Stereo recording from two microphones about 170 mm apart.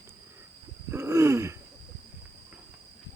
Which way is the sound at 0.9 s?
15° right (ahead or behind).